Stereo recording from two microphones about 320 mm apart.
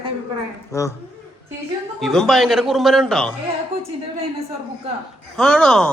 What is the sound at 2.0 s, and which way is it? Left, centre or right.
A man's voice, centre.